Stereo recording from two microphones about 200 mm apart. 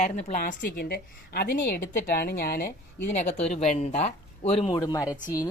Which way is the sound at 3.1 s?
35° left (ahead or behind).